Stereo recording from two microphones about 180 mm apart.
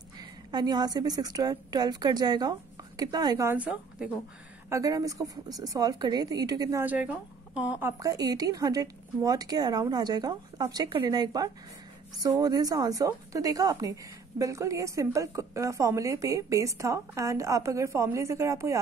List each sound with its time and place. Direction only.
0.2 s a woman's voice: 25° right (ahead or behind); by 4.1 s 5° right (ahead or behind)
4.6 s a woman's voice: 20° right (ahead or behind)
8.0 s a woman's voice: 20° right (ahead or behind)